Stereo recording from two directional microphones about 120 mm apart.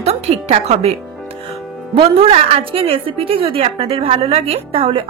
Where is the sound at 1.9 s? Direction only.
50° right (ahead or behind).